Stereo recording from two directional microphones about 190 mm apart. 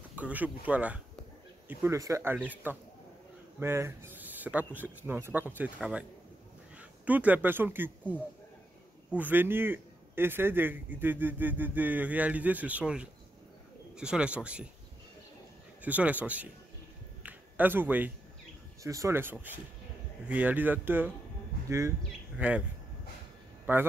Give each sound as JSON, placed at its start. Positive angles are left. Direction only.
{"t": 0.1, "sound": "a man's voice", "side_deg": -10}
{"t": 9.1, "sound": "a man's voice", "side_deg": -10}
{"t": 15.8, "sound": "a man's voice", "side_deg": -10}
{"t": 17.2, "sound": "a sound", "side_deg": -10}
{"t": 18.8, "sound": "a man's voice", "side_deg": -15}
{"t": 23.6, "sound": "a man's voice", "side_deg": -10}